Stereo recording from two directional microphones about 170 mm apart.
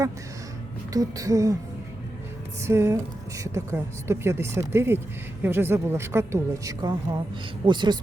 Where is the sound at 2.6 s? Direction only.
15° right (ahead or behind).